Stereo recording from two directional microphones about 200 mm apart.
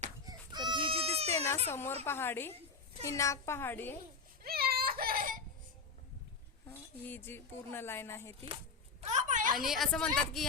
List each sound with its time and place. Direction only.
0.3 s a sound: 20° right (ahead or behind)
0.9 s baby cry: 30° right (ahead or behind)
1.5 s speech: 10° left (ahead or behind)
4.4 s baby cry: 50° right (ahead or behind)
6.7 s speech: 10° left (ahead or behind)
9.0 s a sound: 35° right (ahead or behind)
9.6 s a woman's voice: centre (ahead or behind)